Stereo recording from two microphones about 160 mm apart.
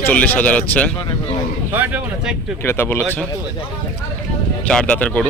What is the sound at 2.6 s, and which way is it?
Speech, 15° left (ahead or behind).